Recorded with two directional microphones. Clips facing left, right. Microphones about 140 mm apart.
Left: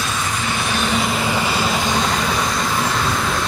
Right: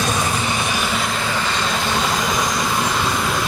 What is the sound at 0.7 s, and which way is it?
Vehicle, 5° right (ahead or behind).